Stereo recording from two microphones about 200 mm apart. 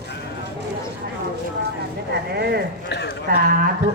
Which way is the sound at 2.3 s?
55° right (ahead or behind).